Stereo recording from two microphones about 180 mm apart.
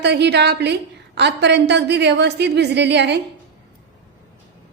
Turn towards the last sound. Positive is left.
turn(degrees=-70)  # may be behind; listen again after turning